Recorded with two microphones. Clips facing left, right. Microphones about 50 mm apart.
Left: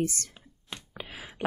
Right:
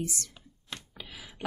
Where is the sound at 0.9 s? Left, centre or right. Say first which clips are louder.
Left 4 dB; left.